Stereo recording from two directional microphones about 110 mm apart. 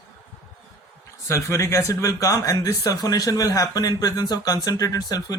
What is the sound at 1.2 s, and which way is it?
Speech, 25° left (ahead or behind).